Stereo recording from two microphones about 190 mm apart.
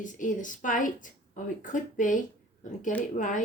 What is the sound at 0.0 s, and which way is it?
A woman's voice, 40° left (ahead or behind).